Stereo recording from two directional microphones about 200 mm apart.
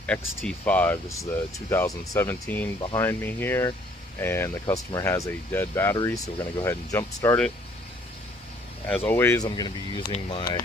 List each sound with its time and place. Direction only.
0.0 s speech: 5° left (ahead or behind)
8.9 s speech: 10° left (ahead or behind)